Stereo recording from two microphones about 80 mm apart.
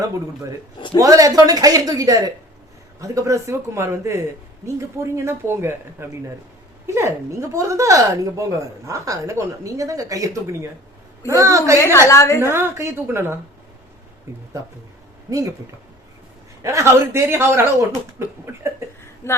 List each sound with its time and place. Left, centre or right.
0.9 s a woman's voice: right
11.8 s a woman's voice: left
12.4 s a woman's voice: right
15.3 s speech: right
16.6 s a woman's voice: right
19.2 s a woman's voice: left